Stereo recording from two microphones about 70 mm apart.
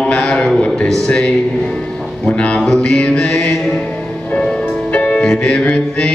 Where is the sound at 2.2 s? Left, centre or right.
Centre.